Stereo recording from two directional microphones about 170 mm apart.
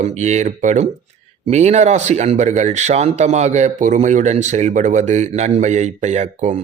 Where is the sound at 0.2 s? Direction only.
45° right (ahead or behind).